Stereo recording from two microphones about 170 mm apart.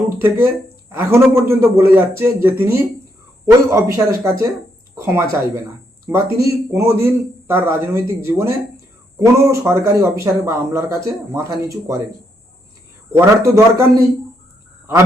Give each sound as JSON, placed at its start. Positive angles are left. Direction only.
{"t": 0.2, "sound": "speech", "side_deg": -15}
{"t": 13.1, "sound": "speech", "side_deg": -15}